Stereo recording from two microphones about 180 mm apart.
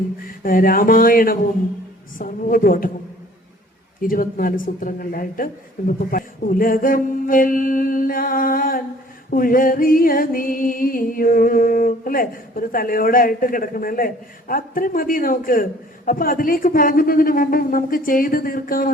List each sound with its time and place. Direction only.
0.3 s music: 50° left (ahead or behind)
4.0 s music: 50° left (ahead or behind)